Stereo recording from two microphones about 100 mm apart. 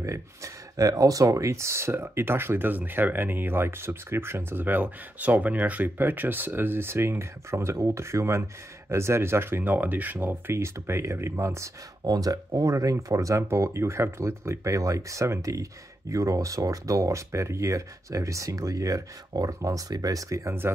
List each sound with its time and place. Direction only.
0.0 s speech: 30° right (ahead or behind)